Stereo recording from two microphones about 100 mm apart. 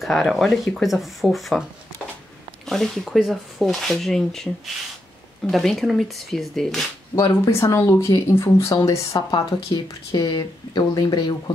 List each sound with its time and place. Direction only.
0.0 s speech: centre (ahead or behind)
2.6 s speech: 5° left (ahead or behind)
7.2 s speech: 30° left (ahead or behind)
9.3 s speech: 45° left (ahead or behind)